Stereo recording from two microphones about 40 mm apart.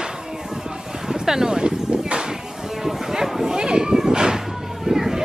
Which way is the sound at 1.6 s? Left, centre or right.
Right.